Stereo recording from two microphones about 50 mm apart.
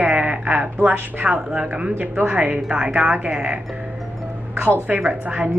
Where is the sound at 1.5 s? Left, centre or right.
Right.